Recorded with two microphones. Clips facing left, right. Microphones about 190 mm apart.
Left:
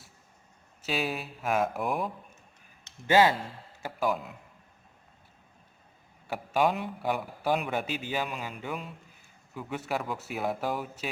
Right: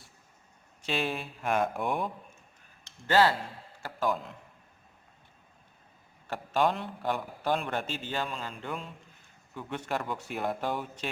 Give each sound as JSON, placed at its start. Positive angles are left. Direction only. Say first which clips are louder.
{"t": 0.8, "sound": "speech", "louder": "even", "side_deg": 5}
{"t": 3.1, "sound": "speech", "louder": "left 2 dB", "side_deg": 15}
{"t": 6.2, "sound": "speech", "louder": "left 1 dB", "side_deg": 10}